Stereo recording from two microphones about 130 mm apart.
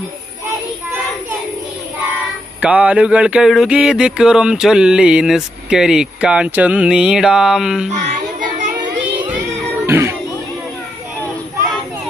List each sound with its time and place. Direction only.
2.6 s a sound: 10° right (ahead or behind)
7.9 s child singing: 75° right (ahead or behind)
9.8 s music: 20° right (ahead or behind)